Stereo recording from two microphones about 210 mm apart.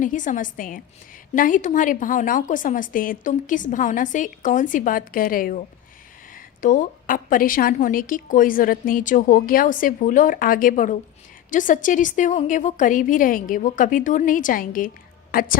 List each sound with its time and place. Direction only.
0.0 s a woman's voice: 35° left (ahead or behind)